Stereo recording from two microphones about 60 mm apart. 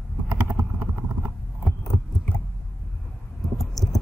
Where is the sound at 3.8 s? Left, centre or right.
Centre.